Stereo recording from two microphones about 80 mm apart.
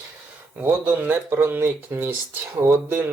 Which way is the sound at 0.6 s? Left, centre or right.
Right.